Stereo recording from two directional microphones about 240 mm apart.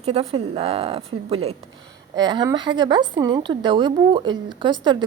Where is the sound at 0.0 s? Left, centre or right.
Right.